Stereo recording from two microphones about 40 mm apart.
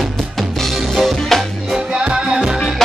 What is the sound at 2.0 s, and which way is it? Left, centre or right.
Music, right.